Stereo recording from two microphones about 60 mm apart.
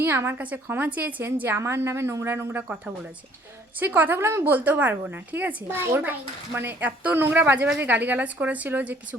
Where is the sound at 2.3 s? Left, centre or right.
Right.